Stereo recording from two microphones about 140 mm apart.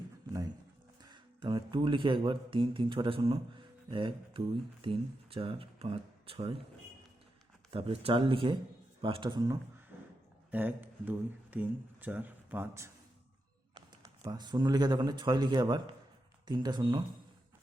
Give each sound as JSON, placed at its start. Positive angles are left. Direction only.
{"t": 1.0, "sound": "speech", "side_deg": -35}
{"t": 7.7, "sound": "speech", "side_deg": -40}
{"t": 10.5, "sound": "speech", "side_deg": -15}
{"t": 13.7, "sound": "speech", "side_deg": -30}